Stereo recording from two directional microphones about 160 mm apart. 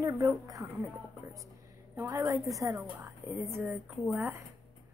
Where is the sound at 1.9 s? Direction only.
15° right (ahead or behind).